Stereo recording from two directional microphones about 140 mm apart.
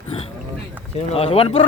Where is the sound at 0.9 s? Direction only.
45° left (ahead or behind).